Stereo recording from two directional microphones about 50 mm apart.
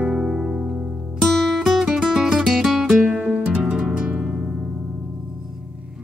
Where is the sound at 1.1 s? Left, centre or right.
Centre.